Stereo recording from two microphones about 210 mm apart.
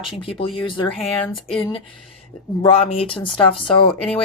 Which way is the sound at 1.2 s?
5° left (ahead or behind).